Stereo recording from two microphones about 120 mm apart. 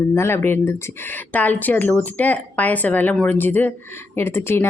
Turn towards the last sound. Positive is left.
turn(degrees=20)  # may be behind; listen again after turning